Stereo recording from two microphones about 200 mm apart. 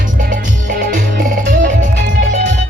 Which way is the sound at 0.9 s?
40° right (ahead or behind).